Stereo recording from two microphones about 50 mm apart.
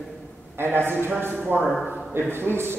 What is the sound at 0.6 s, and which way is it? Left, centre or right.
Speech, right.